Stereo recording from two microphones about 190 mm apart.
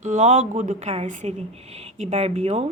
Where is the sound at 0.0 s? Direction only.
40° right (ahead or behind).